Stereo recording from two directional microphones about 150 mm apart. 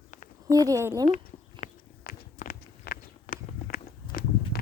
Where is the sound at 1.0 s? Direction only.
50° left (ahead or behind).